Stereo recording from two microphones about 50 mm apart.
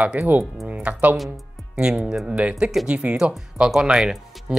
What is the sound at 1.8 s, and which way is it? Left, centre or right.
Speech, centre.